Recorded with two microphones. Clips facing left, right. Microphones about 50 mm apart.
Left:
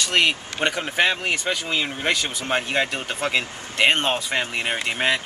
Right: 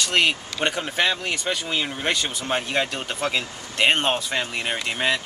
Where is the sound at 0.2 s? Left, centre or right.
Left.